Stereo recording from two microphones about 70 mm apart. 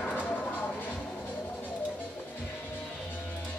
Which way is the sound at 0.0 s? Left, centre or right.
Centre.